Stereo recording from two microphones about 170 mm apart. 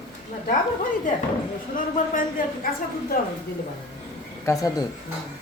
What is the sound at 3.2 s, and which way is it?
Speech, 60° left (ahead or behind).